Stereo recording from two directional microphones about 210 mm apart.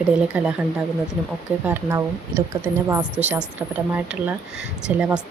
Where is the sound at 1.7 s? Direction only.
10° right (ahead or behind).